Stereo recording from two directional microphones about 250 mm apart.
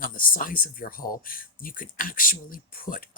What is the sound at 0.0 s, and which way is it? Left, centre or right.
Speech, left.